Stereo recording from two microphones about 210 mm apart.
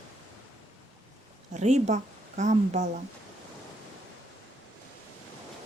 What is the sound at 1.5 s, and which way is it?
Speech, 35° right (ahead or behind).